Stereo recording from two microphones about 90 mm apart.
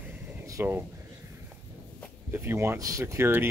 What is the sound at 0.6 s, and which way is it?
Speech, 25° right (ahead or behind).